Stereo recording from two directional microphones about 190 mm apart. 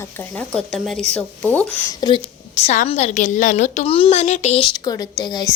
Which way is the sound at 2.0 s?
25° left (ahead or behind).